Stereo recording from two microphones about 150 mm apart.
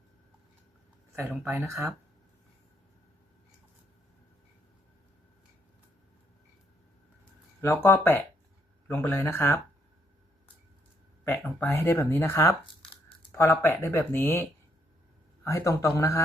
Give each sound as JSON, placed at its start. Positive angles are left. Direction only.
{"t": 1.2, "sound": "speech", "side_deg": -10}
{"t": 7.6, "sound": "speech", "side_deg": 15}
{"t": 11.3, "sound": "speech", "side_deg": 15}
{"t": 15.4, "sound": "speech", "side_deg": 20}